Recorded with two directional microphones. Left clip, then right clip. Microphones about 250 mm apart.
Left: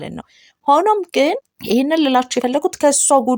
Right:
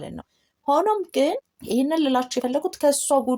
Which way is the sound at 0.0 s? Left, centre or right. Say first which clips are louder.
Left 6 dB; left.